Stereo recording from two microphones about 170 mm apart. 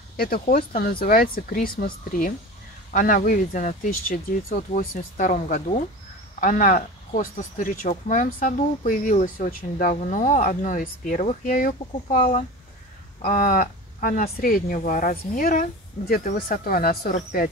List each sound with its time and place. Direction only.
0.2 s speech: 60° left (ahead or behind)
12.2 s speech: 40° left (ahead or behind)
13.2 s speech: 55° left (ahead or behind)